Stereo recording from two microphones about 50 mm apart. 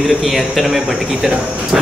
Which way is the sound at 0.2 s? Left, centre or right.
Centre.